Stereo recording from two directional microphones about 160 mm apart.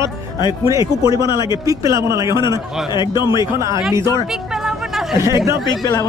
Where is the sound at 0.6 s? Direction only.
20° right (ahead or behind).